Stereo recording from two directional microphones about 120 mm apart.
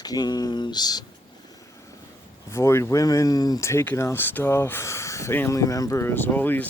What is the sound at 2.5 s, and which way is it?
Speech, 20° left (ahead or behind).